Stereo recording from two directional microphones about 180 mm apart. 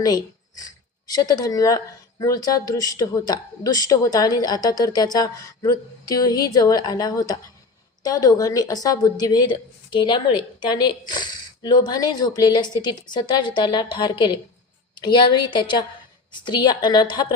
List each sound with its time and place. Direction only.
0.0 s speech: 20° left (ahead or behind)